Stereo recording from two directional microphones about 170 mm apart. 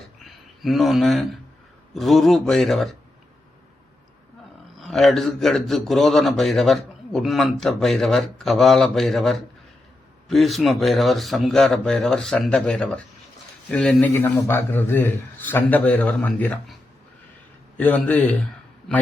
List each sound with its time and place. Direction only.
0.3 s a man's voice: centre (ahead or behind)
4.8 s a man's voice: centre (ahead or behind)
17.7 s a man's voice: 10° left (ahead or behind)